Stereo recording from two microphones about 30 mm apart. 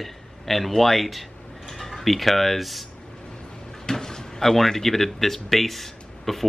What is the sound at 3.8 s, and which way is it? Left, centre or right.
Drawer open or close, left.